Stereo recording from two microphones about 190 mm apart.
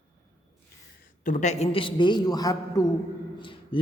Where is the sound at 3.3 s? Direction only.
25° left (ahead or behind).